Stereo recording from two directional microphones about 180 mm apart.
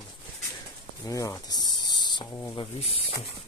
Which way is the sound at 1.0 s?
20° left (ahead or behind).